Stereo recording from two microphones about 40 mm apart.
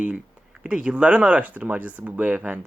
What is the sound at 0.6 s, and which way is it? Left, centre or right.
Speech, right.